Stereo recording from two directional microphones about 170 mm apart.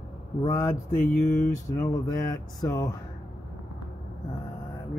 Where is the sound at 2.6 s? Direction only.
20° left (ahead or behind).